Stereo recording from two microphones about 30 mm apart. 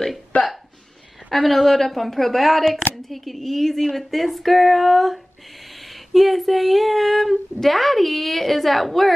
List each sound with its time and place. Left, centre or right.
0.3 s speech: left
1.3 s a woman's voice: centre
2.7 s a sound: centre